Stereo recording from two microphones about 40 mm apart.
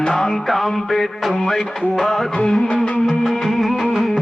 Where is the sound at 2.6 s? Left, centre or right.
Left.